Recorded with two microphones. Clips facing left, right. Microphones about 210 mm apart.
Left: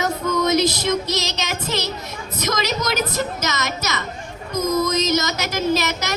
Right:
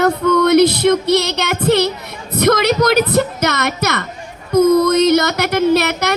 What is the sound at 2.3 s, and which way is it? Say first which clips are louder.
A woman's voice: right 10 dB; 60° right (ahead or behind).